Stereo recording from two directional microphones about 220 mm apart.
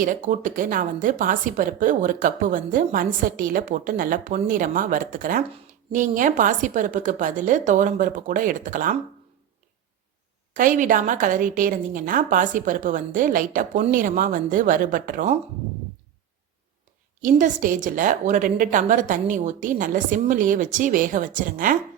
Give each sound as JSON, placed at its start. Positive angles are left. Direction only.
{"t": 0.0, "sound": "a woman's voice", "side_deg": -35}
{"t": 10.5, "sound": "a woman's voice", "side_deg": -35}
{"t": 17.2, "sound": "a woman's voice", "side_deg": -35}